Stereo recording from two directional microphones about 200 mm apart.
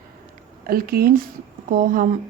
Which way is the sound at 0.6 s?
45° right (ahead or behind).